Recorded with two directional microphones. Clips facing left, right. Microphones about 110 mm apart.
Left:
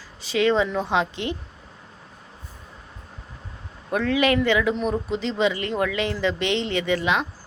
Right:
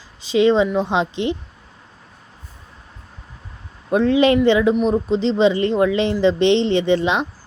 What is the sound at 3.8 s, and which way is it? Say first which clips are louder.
A woman's voice: right 6 dB; 25° right (ahead or behind).